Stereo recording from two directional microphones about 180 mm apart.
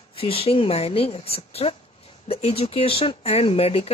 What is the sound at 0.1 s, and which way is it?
Speech, 30° left (ahead or behind).